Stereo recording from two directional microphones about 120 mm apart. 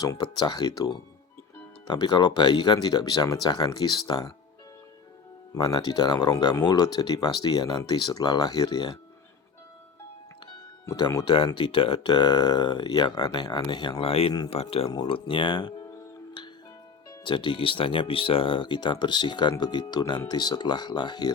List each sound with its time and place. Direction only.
0.0 s speech: 35° left (ahead or behind)
5.5 s speech: 35° left (ahead or behind)
10.4 s speech: 35° left (ahead or behind)
14.0 s speech: 55° left (ahead or behind)
17.2 s speech: 40° left (ahead or behind)